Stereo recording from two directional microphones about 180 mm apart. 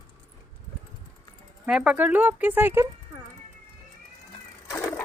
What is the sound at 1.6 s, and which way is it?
Speech, 5° right (ahead or behind).